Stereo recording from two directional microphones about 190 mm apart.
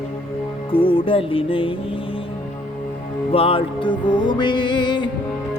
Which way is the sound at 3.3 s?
30° left (ahead or behind).